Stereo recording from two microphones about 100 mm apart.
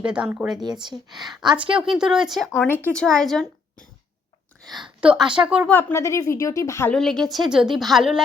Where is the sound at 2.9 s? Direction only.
5° left (ahead or behind).